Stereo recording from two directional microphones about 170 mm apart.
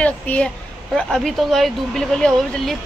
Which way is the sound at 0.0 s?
10° left (ahead or behind).